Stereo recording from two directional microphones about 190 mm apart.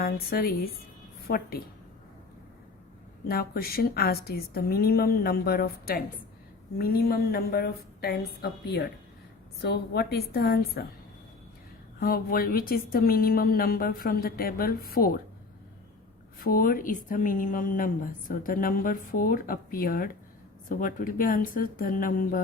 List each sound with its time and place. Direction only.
0.0 s speech: 55° left (ahead or behind)
3.2 s a woman's voice: 55° left (ahead or behind)
11.9 s speech: 50° left (ahead or behind)
16.4 s speech: 50° left (ahead or behind)